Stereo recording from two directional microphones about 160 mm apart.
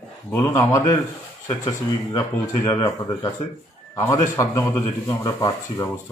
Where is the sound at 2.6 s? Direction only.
20° left (ahead or behind).